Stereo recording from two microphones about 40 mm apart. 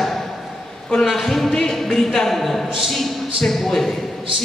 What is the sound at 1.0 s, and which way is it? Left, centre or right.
A man's voice, centre.